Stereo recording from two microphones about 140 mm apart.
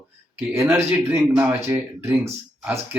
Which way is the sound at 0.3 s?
15° right (ahead or behind).